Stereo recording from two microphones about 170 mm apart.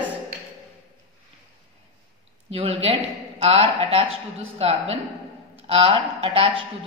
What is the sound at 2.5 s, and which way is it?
Speech, 35° right (ahead or behind).